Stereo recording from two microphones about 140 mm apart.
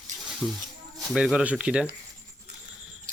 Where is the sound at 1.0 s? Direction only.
Centre (ahead or behind).